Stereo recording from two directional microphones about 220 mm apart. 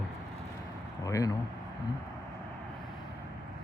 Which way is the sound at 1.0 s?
15° left (ahead or behind).